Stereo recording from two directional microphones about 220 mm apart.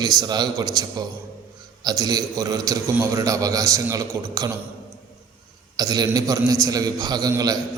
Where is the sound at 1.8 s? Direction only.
15° right (ahead or behind).